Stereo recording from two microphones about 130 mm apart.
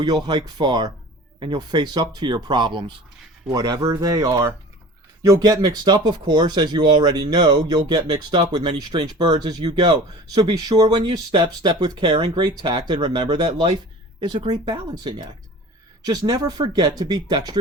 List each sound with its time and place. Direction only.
0.0 s speech: 35° right (ahead or behind)